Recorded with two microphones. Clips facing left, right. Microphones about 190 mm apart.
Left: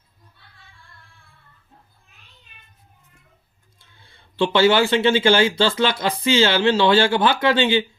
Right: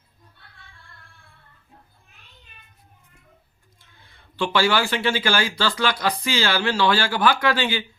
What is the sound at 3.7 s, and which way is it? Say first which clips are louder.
Speech: left 1 dB; 30° left (ahead or behind).